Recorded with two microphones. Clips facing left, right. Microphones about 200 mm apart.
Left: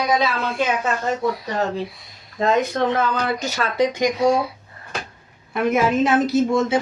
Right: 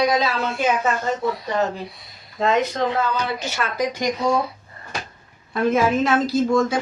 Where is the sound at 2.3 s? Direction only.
55° left (ahead or behind).